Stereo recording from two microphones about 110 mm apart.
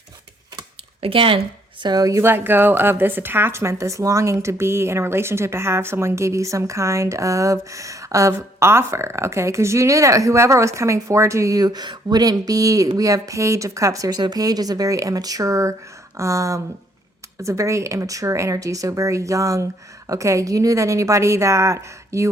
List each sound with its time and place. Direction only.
1.0 s speech: 55° right (ahead or behind)
1.8 s speech: 35° right (ahead or behind)